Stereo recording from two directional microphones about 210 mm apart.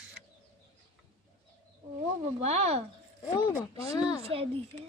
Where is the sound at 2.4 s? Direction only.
30° right (ahead or behind).